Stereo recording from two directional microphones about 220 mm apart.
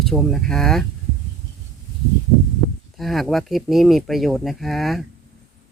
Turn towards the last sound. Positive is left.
turn(degrees=0)  # may be behind; listen again after turning